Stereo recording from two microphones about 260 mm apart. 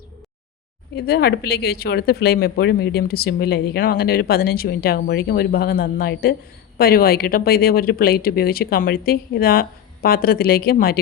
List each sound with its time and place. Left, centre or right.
0.9 s speech: left